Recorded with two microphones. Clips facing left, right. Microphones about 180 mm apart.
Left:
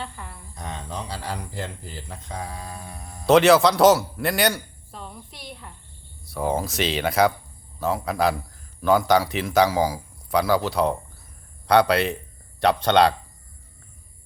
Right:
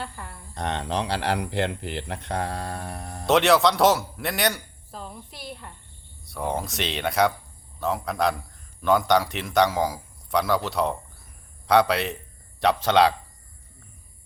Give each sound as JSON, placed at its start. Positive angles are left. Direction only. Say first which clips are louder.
{"t": 0.5, "sound": "speech", "louder": "right 7 dB", "side_deg": -70}
{"t": 3.2, "sound": "a man's voice", "louder": "left 4 dB", "side_deg": 0}